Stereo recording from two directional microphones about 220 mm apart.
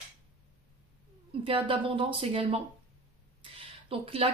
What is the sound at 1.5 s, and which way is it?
Speech, 25° right (ahead or behind).